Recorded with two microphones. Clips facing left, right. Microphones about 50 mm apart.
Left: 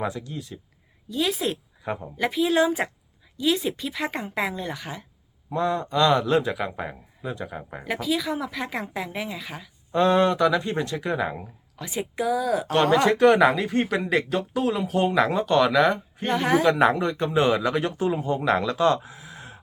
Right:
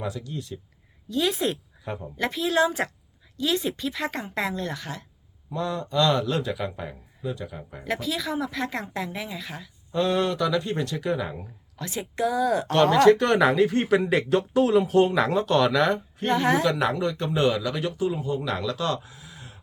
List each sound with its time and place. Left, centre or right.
0.2 s speech: centre
1.8 s speech: centre
2.2 s speech: centre
5.5 s a man's voice: left
7.9 s speech: centre
9.9 s a man's voice: left
10.7 s speech: centre
16.6 s a man's voice: left
17.6 s speech: left
19.0 s a sound: left